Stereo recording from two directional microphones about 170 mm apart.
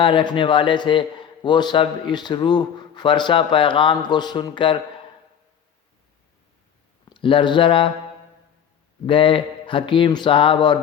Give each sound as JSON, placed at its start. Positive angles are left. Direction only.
{"t": 0.0, "sound": "a man's voice", "side_deg": 30}
{"t": 7.1, "sound": "speech", "side_deg": 30}
{"t": 9.0, "sound": "a man's voice", "side_deg": 30}